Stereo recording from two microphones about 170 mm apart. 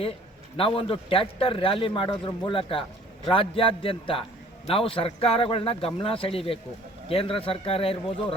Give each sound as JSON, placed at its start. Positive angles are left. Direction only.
{"t": 0.5, "sound": "a man's voice", "side_deg": 35}